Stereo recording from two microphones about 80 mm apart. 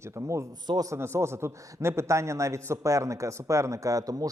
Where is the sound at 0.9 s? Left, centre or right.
Right.